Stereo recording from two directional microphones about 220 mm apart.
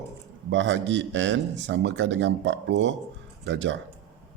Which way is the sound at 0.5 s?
55° right (ahead or behind).